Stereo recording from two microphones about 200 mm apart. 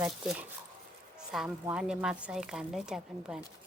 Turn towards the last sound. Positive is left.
turn(degrees=-5)  # may be behind; listen again after turning